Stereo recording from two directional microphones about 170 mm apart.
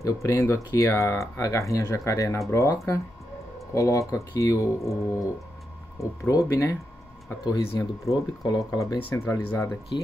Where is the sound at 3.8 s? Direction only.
20° left (ahead or behind).